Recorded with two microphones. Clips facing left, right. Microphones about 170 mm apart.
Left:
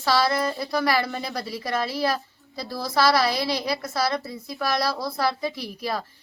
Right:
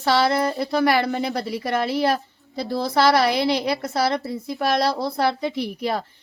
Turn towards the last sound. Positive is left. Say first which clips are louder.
# right 5 dB
turn(degrees=-60)  # may be behind; listen again after turning